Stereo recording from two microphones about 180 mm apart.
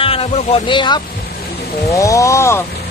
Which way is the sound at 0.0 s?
30° left (ahead or behind).